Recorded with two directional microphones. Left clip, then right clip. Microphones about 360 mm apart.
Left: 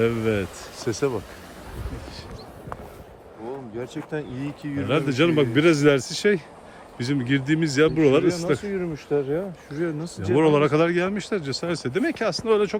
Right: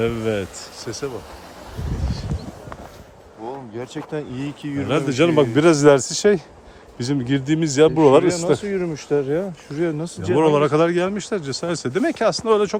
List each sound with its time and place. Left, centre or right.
0.0 s speech: centre
0.8 s speech: centre
3.8 s speech: right
4.9 s speech: centre
8.5 s speech: right
10.3 s speech: centre